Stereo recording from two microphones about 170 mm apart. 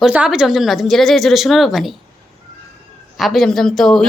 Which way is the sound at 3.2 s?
Centre (ahead or behind).